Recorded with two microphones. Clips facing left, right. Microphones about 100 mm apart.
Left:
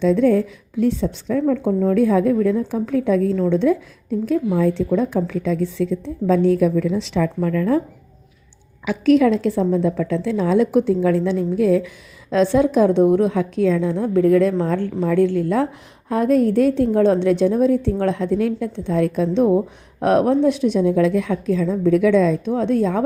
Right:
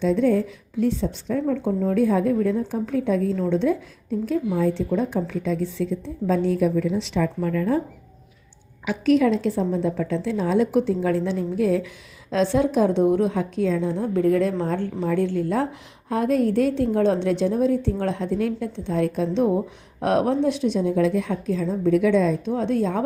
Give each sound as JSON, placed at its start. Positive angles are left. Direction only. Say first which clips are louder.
{"t": 0.0, "sound": "a woman's voice", "louder": "left 4 dB", "side_deg": 90}
{"t": 1.6, "sound": "a woman's voice", "louder": "left 4 dB", "side_deg": 55}
{"t": 4.9, "sound": "speech", "louder": "left 4 dB", "side_deg": 90}
{"t": 5.8, "sound": "a woman's voice", "louder": "left 4 dB", "side_deg": 65}
{"t": 8.9, "sound": "a woman's voice", "louder": "left 4 dB", "side_deg": 75}
{"t": 13.1, "sound": "a woman's voice", "louder": "left 4 dB", "side_deg": 75}
{"t": 16.0, "sound": "a woman's voice", "louder": "left 4 dB", "side_deg": 45}
{"t": 22.5, "sound": "a woman's voice", "louder": "left 4 dB", "side_deg": 55}